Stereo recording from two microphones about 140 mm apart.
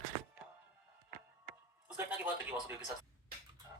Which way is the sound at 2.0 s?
15° right (ahead or behind).